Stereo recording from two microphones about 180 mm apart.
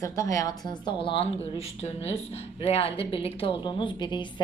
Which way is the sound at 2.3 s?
35° left (ahead or behind).